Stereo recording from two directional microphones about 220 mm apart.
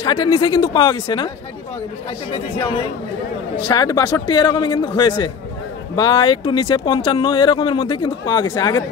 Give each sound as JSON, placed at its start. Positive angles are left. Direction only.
{"t": 0.0, "sound": "speech", "side_deg": 20}
{"t": 2.3, "sound": "speech", "side_deg": 25}